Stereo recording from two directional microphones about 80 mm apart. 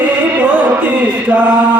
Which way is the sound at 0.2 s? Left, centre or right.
Centre.